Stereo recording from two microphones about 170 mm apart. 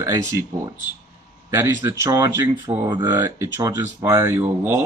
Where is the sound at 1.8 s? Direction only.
15° right (ahead or behind).